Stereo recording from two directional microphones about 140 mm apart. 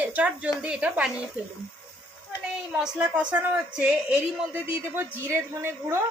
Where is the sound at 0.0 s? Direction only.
10° right (ahead or behind).